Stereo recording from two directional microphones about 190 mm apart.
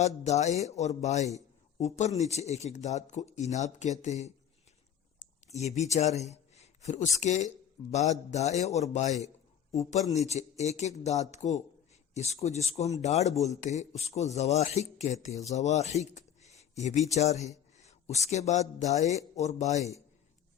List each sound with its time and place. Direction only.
0.0 s speech: 35° left (ahead or behind)